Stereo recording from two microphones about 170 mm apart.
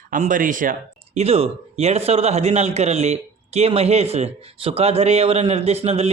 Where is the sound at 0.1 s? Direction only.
50° right (ahead or behind).